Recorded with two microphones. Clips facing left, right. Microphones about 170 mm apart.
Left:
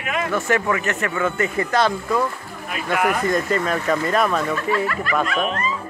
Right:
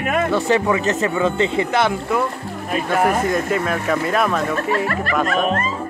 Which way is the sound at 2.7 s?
40° right (ahead or behind).